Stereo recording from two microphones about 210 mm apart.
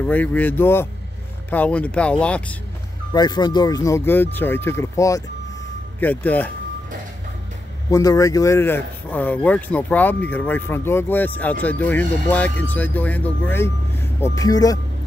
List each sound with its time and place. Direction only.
0.0 s speech: 5° left (ahead or behind)
3.1 s speech: 20° left (ahead or behind)
7.9 s speech: 15° left (ahead or behind)